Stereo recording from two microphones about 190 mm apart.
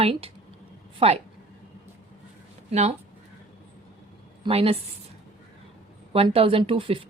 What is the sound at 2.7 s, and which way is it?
Speech, 35° right (ahead or behind).